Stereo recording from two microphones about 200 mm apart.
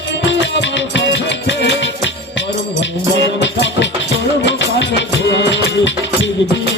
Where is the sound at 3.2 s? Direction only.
65° left (ahead or behind).